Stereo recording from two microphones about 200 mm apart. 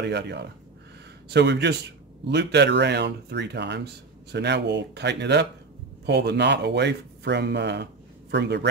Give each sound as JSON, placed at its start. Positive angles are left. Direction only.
{"t": 0.0, "sound": "speech", "side_deg": -60}